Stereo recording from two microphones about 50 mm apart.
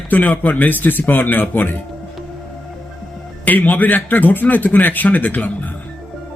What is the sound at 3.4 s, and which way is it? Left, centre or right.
A man's voice, left.